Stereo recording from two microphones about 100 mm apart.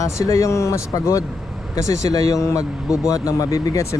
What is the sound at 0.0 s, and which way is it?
Speech, 30° left (ahead or behind).